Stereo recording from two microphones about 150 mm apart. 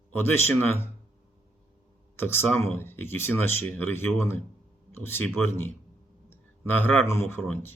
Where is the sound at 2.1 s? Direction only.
15° left (ahead or behind).